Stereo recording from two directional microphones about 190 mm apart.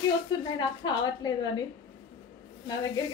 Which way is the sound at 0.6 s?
20° left (ahead or behind).